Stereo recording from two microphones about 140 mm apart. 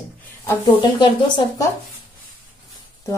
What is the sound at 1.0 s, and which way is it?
Speech, 35° left (ahead or behind).